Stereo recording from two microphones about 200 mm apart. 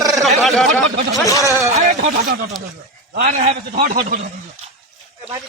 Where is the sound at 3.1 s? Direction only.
50° right (ahead or behind).